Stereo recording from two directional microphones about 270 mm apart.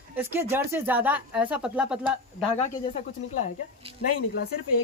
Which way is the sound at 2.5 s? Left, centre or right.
Left.